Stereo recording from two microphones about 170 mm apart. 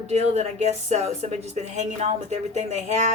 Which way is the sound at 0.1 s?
40° right (ahead or behind).